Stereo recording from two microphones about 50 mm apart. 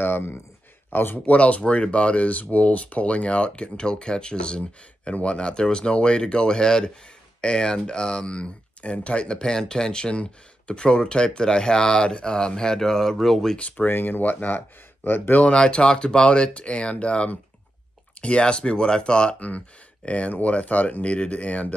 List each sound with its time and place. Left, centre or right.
0.0 s speech: left
1.2 s speech: left; by 13.6 s centre
13.6 s speech: left
13.8 s speech: left
15.3 s speech: centre
20.1 s speech: left